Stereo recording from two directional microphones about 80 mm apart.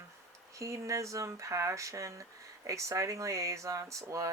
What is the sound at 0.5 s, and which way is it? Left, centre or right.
Speech, right.